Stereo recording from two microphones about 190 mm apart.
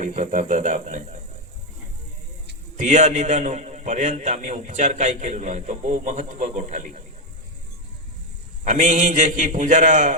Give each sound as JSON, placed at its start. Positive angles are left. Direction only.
{"t": 0.0, "sound": "speech", "side_deg": -40}
{"t": 2.7, "sound": "a man's voice", "side_deg": -40}
{"t": 8.6, "sound": "a man's voice", "side_deg": -40}